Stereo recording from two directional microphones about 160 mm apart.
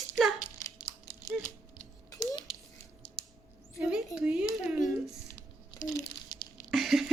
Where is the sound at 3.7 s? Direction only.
5° right (ahead or behind).